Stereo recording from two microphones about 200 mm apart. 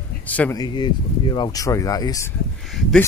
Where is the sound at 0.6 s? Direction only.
20° left (ahead or behind).